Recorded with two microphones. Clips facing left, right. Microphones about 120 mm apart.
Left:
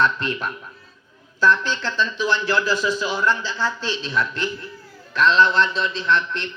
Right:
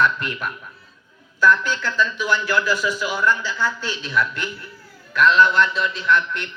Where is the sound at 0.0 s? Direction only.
30° left (ahead or behind).